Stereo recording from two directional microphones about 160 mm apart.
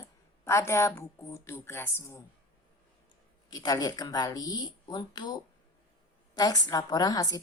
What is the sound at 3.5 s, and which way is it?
A woman's voice, 25° left (ahead or behind).